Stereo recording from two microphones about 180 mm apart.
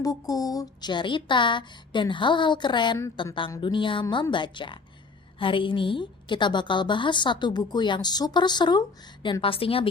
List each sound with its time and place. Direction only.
0.0 s a woman's voice: 20° left (ahead or behind)